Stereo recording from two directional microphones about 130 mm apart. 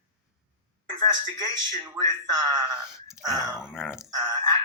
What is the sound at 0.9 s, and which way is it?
Speech, 35° right (ahead or behind).